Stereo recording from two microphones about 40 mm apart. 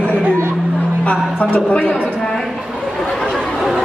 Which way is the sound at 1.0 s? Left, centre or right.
Left.